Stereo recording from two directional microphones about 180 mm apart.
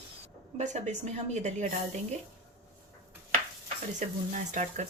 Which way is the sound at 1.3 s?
40° right (ahead or behind).